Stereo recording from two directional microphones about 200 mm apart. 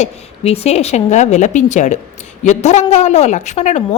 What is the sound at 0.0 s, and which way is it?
Speech, 30° left (ahead or behind).